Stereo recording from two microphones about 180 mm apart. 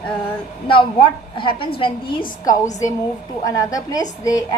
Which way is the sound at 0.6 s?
30° left (ahead or behind).